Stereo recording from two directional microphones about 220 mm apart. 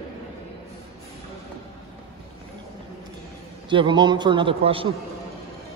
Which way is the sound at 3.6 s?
20° right (ahead or behind).